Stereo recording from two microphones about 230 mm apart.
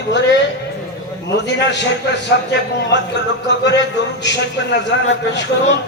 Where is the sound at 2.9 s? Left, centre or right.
Left.